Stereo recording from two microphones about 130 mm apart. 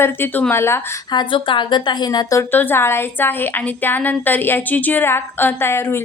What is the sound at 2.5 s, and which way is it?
A woman's voice, 15° left (ahead or behind).